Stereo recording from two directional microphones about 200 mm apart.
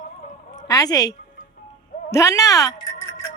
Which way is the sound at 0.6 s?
15° left (ahead or behind).